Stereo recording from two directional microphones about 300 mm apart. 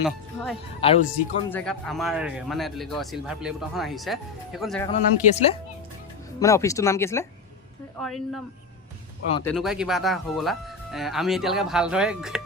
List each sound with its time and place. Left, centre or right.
0.8 s speech: centre
1.5 s speech: centre
4.9 s speech: centre